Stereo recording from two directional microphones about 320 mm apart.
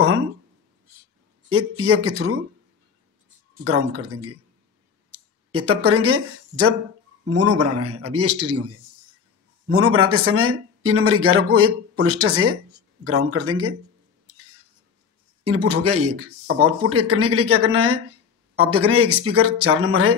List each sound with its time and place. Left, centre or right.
1.5 s speech: right
3.6 s speech: right
9.7 s speech: right
15.4 s speech: right